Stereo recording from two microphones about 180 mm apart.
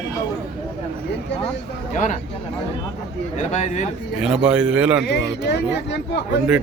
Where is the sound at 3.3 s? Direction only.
40° left (ahead or behind).